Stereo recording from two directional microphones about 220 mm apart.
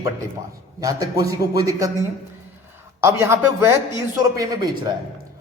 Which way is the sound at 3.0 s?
10° right (ahead or behind).